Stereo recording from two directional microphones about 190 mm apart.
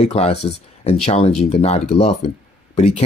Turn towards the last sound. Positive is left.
turn(degrees=35)  # may be behind; listen again after turning